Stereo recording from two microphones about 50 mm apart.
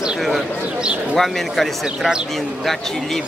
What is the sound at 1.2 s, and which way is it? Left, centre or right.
Speech, centre.